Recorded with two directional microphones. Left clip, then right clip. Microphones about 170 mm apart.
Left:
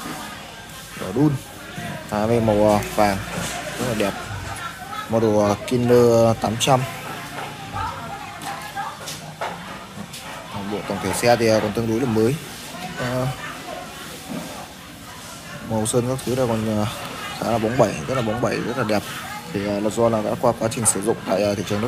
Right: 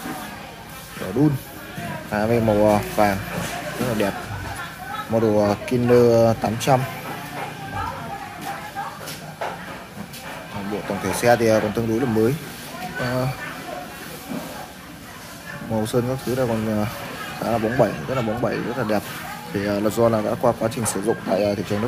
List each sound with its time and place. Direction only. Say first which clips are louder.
2.0 s speech: even; centre (ahead or behind)
5.1 s speech: left 1 dB; centre (ahead or behind)
10.9 s speech: even; centre (ahead or behind)
15.7 s a man's voice: left 1 dB; centre (ahead or behind)
19.8 s speech: even; 25° right (ahead or behind)
20.2 s speech: even; 5° right (ahead or behind)